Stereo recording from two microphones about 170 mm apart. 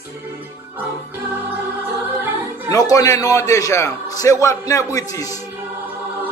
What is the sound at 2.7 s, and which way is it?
A man's voice, 20° left (ahead or behind).